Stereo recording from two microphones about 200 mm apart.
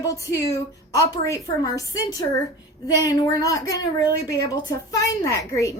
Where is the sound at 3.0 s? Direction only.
20° left (ahead or behind).